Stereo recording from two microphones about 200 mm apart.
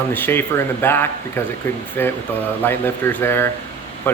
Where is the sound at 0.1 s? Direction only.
10° left (ahead or behind).